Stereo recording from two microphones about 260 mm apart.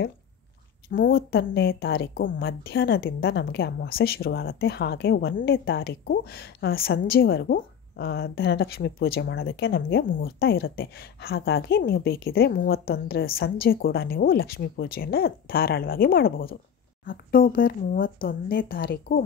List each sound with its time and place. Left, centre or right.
0.8 s a woman's voice: left